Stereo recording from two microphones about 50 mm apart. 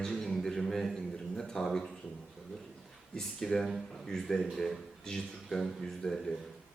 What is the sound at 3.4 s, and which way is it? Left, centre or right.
A man's voice, centre.